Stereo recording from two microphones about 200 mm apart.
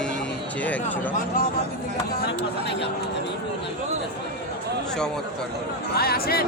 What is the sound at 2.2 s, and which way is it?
Speech, 55° left (ahead or behind).